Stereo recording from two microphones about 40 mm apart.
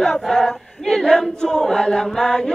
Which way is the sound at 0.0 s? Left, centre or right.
Centre.